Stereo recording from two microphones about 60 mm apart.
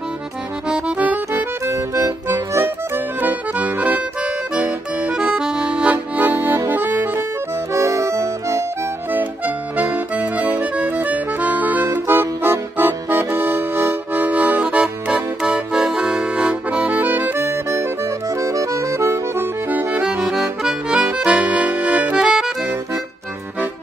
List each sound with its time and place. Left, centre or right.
0.7 s music: centre
1.3 s accordion: right
3.2 s accordion: right
4.2 s accordion: centre
7.7 s accordion: right
9.1 s accordion: right
14.2 s accordion: right
17.1 s accordion: right
18.3 s music: right
19.4 s music: right
20.2 s accordion: centre
22.2 s music: centre